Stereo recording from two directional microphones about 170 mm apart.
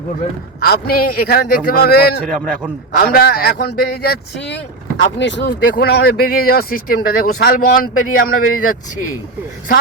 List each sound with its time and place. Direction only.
0.6 s speech: 60° left (ahead or behind)
2.2 s a man's voice: 5° left (ahead or behind)
3.1 s speech: 65° left (ahead or behind)